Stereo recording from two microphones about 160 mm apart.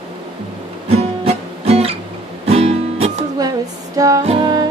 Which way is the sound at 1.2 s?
40° right (ahead or behind).